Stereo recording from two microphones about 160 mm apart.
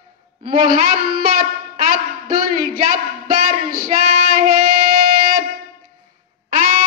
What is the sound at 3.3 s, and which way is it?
Child singing, 70° right (ahead or behind).